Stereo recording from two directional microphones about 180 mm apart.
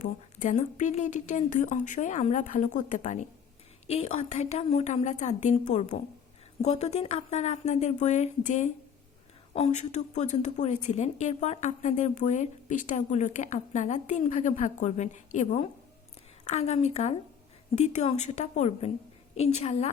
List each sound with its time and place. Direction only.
0.0 s a woman's voice: 45° left (ahead or behind)